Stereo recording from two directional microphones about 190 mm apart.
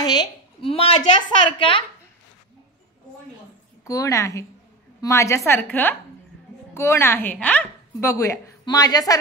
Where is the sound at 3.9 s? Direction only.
15° left (ahead or behind).